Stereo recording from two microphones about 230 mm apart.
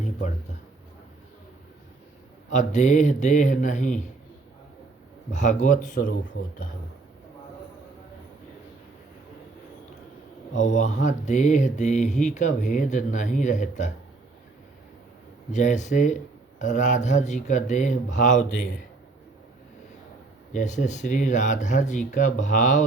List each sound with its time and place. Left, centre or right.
0.0 s a sound: left
2.5 s speech: left
5.3 s speech: left
10.5 s speech: left
15.5 s speech: left
20.5 s speech: left